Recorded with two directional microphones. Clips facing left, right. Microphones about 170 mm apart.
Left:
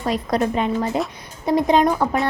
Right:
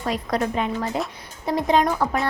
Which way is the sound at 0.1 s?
25° left (ahead or behind).